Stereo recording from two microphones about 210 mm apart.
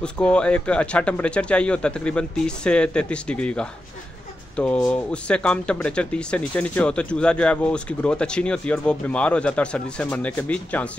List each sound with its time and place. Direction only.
0.0 s speech: 5° left (ahead or behind)